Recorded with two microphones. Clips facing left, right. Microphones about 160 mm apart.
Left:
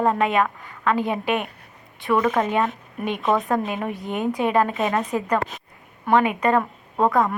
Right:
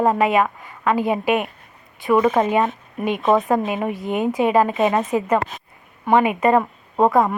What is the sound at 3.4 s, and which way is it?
A woman's voice, 5° right (ahead or behind).